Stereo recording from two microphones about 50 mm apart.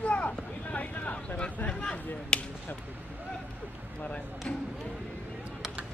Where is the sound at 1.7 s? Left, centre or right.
Centre.